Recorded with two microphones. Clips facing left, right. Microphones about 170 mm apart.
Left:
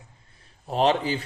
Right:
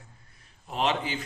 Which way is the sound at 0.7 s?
35° left (ahead or behind).